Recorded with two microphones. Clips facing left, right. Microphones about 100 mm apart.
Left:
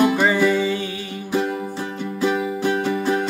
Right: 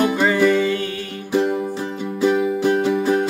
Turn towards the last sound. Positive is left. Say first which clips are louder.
# right 3 dB
turn(degrees=-5)  # may be behind; listen again after turning